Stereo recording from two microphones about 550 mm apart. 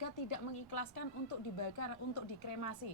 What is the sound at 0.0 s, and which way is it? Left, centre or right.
Speech, left.